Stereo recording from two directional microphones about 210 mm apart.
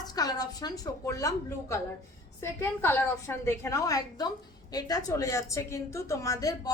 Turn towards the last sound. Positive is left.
turn(degrees=15)  # may be behind; listen again after turning